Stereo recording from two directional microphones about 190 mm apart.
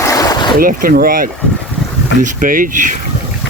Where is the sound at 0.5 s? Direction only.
50° right (ahead or behind).